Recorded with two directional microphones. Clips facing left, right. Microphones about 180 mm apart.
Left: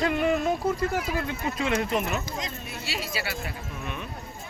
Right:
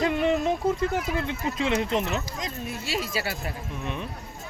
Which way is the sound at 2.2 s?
45° right (ahead or behind).